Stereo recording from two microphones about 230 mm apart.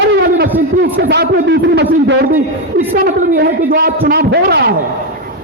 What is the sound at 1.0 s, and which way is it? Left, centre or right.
A man's voice, right.